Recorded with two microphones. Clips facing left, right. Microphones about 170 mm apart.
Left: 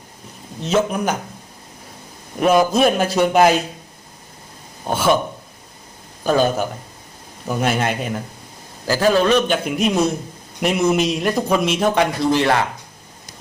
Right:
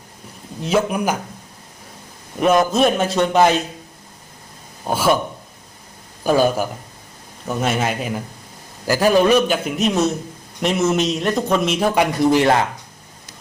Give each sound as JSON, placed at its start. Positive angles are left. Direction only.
{"t": 0.6, "sound": "a man's voice", "side_deg": -10}
{"t": 2.4, "sound": "a man's voice", "side_deg": 0}
{"t": 4.9, "sound": "a man's voice", "side_deg": 0}
{"t": 6.2, "sound": "a man's voice", "side_deg": -10}
{"t": 9.6, "sound": "a man's voice", "side_deg": 0}
{"t": 12.2, "sound": "speech", "side_deg": -15}